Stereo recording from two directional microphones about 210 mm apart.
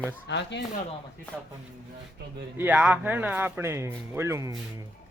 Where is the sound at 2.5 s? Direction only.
5° right (ahead or behind).